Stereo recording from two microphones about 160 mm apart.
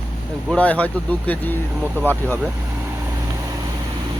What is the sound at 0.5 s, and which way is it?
Speech, 10° left (ahead or behind).